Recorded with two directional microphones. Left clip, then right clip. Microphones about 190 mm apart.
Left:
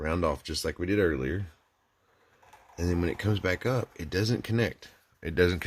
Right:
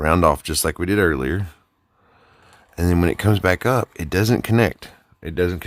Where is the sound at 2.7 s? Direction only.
50° right (ahead or behind).